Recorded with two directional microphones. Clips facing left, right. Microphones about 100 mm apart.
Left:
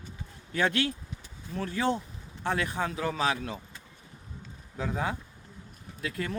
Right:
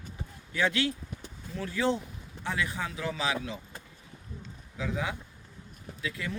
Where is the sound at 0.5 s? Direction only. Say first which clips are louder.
Left 1 dB; 50° left (ahead or behind).